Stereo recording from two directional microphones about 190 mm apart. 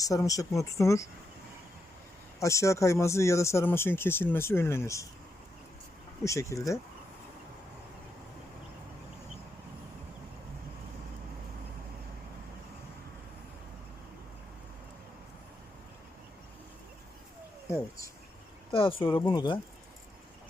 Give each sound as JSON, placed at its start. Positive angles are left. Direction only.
{"t": 0.0, "sound": "speech", "side_deg": 20}
{"t": 2.4, "sound": "speech", "side_deg": 15}
{"t": 6.2, "sound": "speech", "side_deg": 15}
{"t": 18.7, "sound": "speech", "side_deg": 30}